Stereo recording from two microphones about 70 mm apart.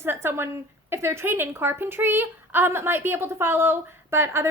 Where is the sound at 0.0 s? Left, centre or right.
Right.